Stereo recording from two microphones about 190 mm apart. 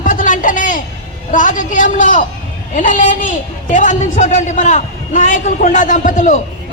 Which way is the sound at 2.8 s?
40° left (ahead or behind).